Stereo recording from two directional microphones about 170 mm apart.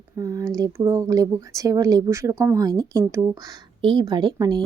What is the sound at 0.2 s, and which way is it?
Speech, 20° right (ahead or behind).